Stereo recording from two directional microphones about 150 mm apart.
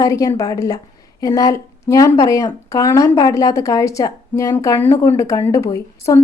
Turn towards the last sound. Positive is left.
turn(degrees=20)  # may be behind; listen again after turning